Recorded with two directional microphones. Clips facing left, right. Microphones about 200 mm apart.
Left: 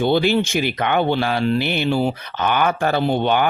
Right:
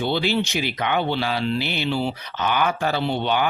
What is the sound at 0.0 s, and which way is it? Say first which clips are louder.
Speech: left 5 dB; 50° left (ahead or behind).